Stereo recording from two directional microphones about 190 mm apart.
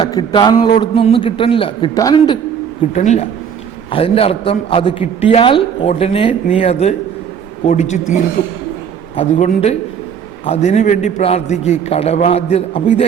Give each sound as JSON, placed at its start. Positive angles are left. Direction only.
{"t": 0.0, "sound": "a man's voice", "side_deg": 25}
{"t": 2.9, "sound": "a man's voice", "side_deg": 35}